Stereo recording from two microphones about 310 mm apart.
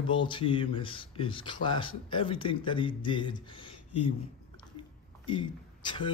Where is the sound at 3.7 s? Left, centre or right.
Left.